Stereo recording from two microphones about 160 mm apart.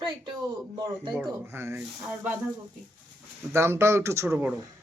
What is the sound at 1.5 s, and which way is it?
Speech, 15° right (ahead or behind).